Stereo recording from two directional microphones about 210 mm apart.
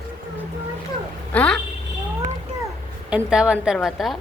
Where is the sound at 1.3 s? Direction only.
5° left (ahead or behind).